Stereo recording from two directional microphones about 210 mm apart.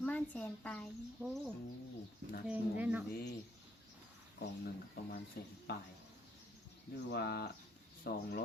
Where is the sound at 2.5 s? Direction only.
5° right (ahead or behind).